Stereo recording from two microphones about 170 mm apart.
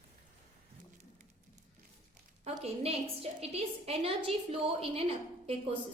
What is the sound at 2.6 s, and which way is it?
A woman's voice, 35° right (ahead or behind).